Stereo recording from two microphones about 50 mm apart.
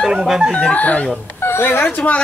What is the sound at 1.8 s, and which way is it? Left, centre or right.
Speech, left.